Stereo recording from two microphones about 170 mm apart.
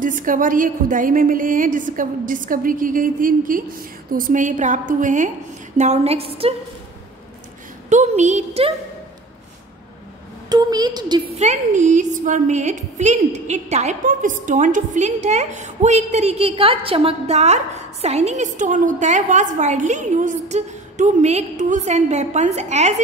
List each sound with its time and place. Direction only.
0.0 s a woman's voice: 50° right (ahead or behind); by 6.5 s 35° right (ahead or behind)
7.9 s a woman's voice: 45° right (ahead or behind)
10.5 s a woman's voice: 25° right (ahead or behind)
11.3 s a woman's voice: 45° right (ahead or behind)